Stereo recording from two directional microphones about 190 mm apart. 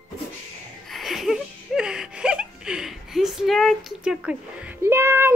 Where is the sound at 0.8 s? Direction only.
Centre (ahead or behind).